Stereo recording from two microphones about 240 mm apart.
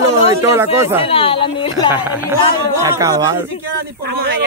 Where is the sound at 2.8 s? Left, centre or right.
Centre.